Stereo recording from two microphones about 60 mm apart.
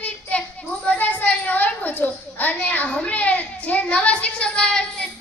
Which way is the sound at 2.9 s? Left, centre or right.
Left.